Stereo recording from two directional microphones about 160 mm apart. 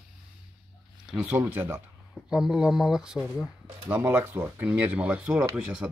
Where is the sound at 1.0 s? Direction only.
10° right (ahead or behind).